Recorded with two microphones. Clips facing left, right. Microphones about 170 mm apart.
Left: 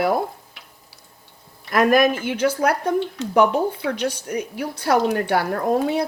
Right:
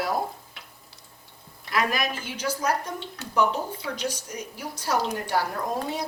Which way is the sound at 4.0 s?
60° left (ahead or behind).